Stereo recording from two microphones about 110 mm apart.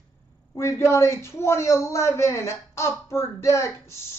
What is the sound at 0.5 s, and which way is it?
Speech, 25° left (ahead or behind).